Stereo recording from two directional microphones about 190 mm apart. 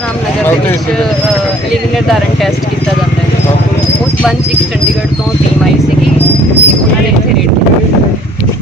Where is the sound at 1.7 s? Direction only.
Centre (ahead or behind).